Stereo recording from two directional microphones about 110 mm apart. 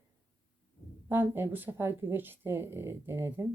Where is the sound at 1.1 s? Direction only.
20° right (ahead or behind).